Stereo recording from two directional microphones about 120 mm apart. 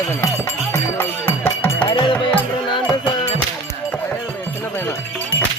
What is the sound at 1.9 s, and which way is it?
Music, 40° left (ahead or behind).